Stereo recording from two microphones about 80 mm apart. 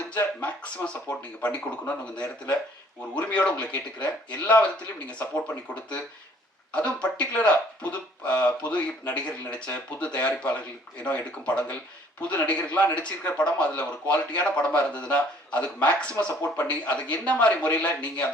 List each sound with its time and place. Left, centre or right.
0.2 s a man's voice: centre
6.7 s a man's voice: centre